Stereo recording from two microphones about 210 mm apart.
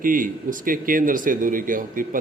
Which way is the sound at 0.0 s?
40° right (ahead or behind).